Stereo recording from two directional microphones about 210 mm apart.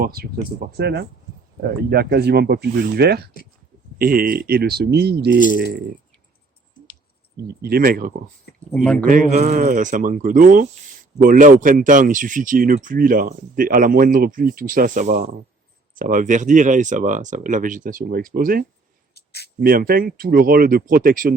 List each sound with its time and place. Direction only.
0.0 s speech: 45° right (ahead or behind)
7.4 s speech: 45° right (ahead or behind)
8.7 s speech: 5° left (ahead or behind)
9.0 s speech: 40° right (ahead or behind)
19.1 s a sound: 50° left (ahead or behind)
19.5 s speech: 45° right (ahead or behind)